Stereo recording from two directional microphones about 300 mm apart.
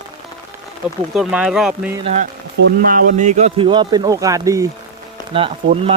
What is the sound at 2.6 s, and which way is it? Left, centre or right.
Speech, right.